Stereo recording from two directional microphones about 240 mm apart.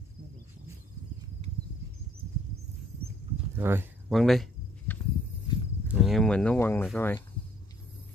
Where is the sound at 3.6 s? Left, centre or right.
Centre.